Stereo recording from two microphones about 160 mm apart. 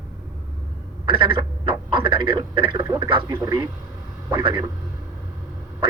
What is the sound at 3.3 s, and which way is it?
Speech, 15° right (ahead or behind).